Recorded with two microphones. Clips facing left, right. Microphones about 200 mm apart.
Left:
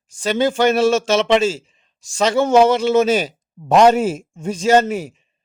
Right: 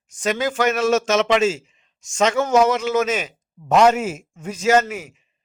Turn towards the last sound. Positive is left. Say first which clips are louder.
# left 3 dB
turn(degrees=30)  # may be behind; listen again after turning